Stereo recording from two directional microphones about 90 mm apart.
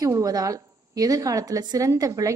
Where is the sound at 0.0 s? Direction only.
40° right (ahead or behind).